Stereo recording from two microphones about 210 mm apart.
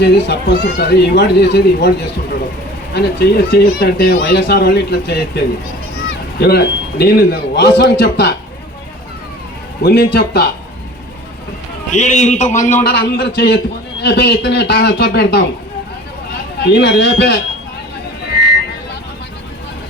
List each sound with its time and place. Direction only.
0.0 s speech: 55° left (ahead or behind)
2.9 s speech: 50° left (ahead or behind)
6.4 s speech: 50° left (ahead or behind)
9.8 s speech: 50° left (ahead or behind)
11.9 s a man's voice: 35° left (ahead or behind)
12.9 s speech: 55° left (ahead or behind)
16.6 s speech: 55° left (ahead or behind)